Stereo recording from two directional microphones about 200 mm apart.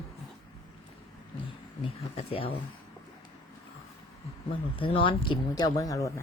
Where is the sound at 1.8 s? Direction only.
25° left (ahead or behind).